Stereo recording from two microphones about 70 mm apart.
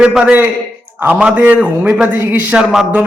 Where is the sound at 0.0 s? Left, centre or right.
Centre.